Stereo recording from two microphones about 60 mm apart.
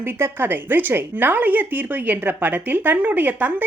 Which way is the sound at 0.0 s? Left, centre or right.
Right.